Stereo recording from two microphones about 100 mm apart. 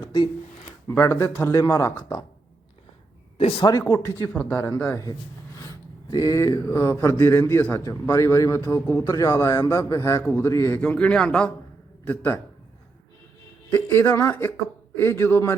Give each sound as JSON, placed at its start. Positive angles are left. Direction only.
{"t": 0.0, "sound": "a sound", "side_deg": 50}
{"t": 0.9, "sound": "a man's voice", "side_deg": 25}
{"t": 3.3, "sound": "speech", "side_deg": 80}
{"t": 4.0, "sound": "a man's voice", "side_deg": 25}
{"t": 6.1, "sound": "speech", "side_deg": 40}
{"t": 6.7, "sound": "a man's voice", "side_deg": 20}
{"t": 10.8, "sound": "speech", "side_deg": 10}
{"t": 14.2, "sound": "a man's voice", "side_deg": 20}